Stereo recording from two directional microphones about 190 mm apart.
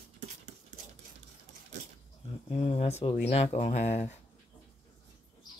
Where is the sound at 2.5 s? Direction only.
35° left (ahead or behind).